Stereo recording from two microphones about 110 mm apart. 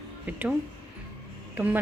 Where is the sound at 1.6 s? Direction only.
15° right (ahead or behind).